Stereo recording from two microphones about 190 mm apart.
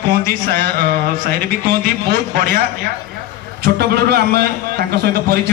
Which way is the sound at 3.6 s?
55° right (ahead or behind).